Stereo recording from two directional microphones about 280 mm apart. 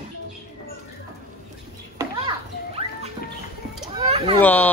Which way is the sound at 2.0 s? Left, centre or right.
Centre.